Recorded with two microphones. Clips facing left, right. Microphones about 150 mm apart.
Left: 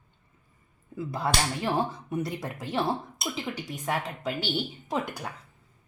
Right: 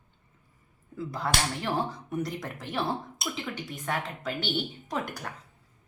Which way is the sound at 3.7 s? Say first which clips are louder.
Left 2 dB; 10° left (ahead or behind).